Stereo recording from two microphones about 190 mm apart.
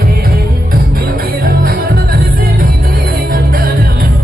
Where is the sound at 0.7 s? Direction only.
50° right (ahead or behind).